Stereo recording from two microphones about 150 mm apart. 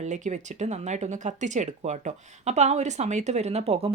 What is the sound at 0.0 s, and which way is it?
Speech, 50° right (ahead or behind).